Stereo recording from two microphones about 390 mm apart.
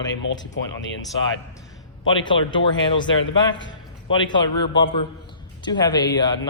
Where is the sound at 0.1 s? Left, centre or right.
Left.